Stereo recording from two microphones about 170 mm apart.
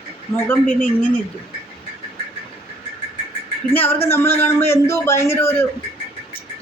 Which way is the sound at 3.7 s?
10° left (ahead or behind).